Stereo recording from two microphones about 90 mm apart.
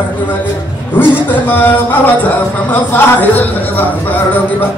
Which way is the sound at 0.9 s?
20° left (ahead or behind).